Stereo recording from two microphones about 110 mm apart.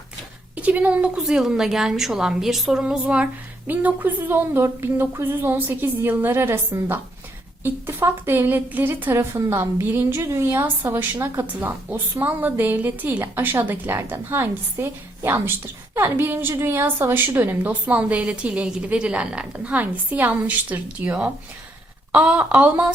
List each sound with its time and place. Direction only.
0.5 s a woman's voice: 15° right (ahead or behind)